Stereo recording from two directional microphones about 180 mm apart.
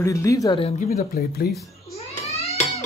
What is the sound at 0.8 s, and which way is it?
Speech, 50° left (ahead or behind).